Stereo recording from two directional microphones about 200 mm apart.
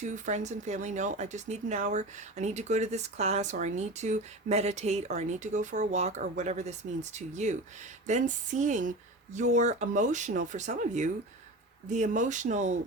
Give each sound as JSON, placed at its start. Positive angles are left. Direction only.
{"t": 0.1, "sound": "speech", "side_deg": -35}